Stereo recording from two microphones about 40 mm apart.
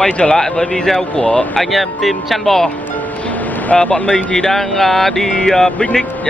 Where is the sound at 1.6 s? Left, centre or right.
Centre.